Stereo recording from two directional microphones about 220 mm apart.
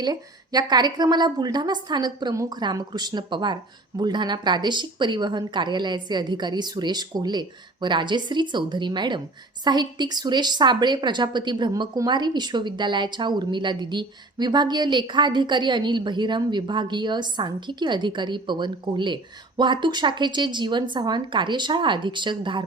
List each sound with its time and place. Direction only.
0.0 s a woman's voice: 20° right (ahead or behind)